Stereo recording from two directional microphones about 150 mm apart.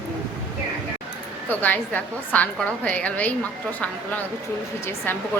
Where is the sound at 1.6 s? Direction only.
10° left (ahead or behind).